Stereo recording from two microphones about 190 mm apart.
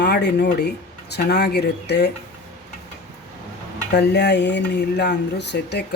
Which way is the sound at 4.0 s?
60° left (ahead or behind).